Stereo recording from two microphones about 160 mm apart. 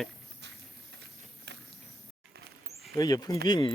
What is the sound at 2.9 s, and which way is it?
Speech, 25° left (ahead or behind).